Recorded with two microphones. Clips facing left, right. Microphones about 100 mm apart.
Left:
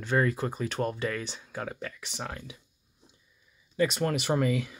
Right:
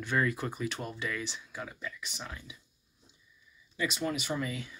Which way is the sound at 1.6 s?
65° left (ahead or behind).